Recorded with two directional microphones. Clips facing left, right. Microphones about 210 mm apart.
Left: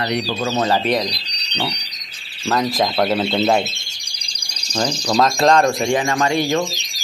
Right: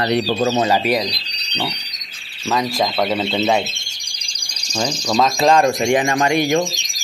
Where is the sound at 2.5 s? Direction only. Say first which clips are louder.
Left 1 dB; centre (ahead or behind).